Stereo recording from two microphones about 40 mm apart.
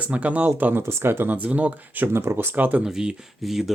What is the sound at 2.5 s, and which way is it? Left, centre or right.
Speech, right.